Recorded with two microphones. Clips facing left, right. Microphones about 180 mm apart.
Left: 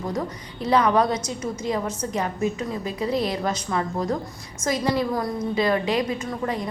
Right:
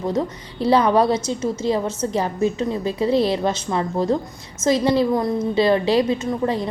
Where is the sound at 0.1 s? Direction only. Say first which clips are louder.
Right 5 dB; 30° right (ahead or behind).